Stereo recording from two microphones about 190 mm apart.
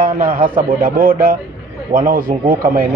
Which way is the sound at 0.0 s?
50° right (ahead or behind).